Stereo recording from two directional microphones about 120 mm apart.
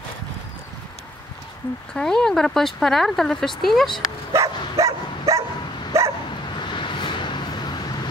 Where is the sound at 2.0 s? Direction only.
5° left (ahead or behind).